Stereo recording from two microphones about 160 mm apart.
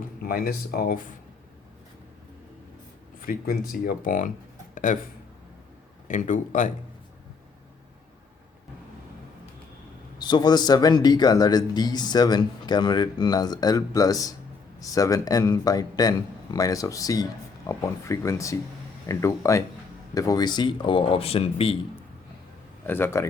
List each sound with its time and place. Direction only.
0.3 s speech: 65° left (ahead or behind)
3.2 s speech: 65° left (ahead or behind)
4.7 s a sound: 50° left (ahead or behind)
6.1 s a man's voice: 50° left (ahead or behind)
10.2 s a man's voice: 25° left (ahead or behind)
22.9 s speech: 15° left (ahead or behind)